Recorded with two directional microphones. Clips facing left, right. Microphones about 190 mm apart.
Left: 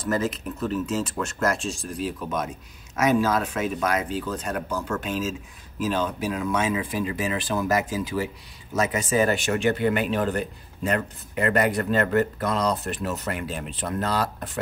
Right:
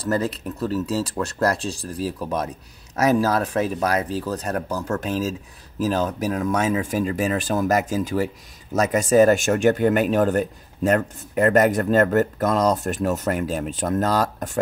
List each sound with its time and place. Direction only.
0.2 s speech: 35° right (ahead or behind)